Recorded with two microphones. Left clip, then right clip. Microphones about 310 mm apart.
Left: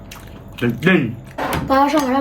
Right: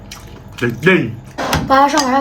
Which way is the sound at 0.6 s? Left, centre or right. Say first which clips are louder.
Right 3 dB; centre.